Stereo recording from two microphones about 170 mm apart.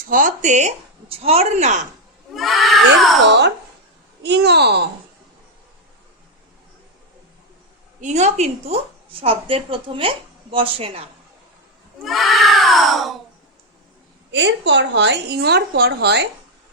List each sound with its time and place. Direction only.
0.1 s speech: 50° right (ahead or behind)
2.3 s crowd: centre (ahead or behind)
3.2 s speech: 90° right
8.0 s a woman's voice: 40° right (ahead or behind)
12.0 s crowd: centre (ahead or behind)
14.3 s a woman's voice: 90° right